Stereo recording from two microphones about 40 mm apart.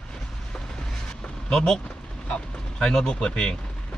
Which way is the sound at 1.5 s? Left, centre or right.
Centre.